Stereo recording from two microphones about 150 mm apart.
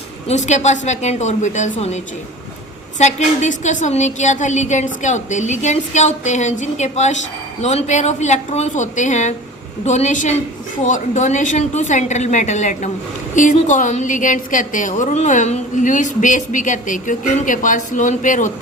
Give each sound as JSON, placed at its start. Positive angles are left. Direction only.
{"t": 0.3, "sound": "a woman's voice", "side_deg": 50}
{"t": 3.0, "sound": "a woman's voice", "side_deg": 50}